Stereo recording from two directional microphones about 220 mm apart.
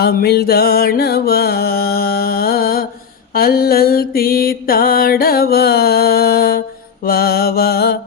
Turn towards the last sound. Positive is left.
turn(degrees=45)  # may be behind; listen again after turning